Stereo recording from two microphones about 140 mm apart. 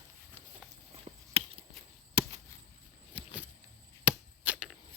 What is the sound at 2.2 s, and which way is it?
Chop, 40° right (ahead or behind).